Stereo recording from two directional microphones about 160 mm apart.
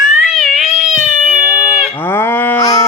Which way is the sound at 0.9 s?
45° left (ahead or behind).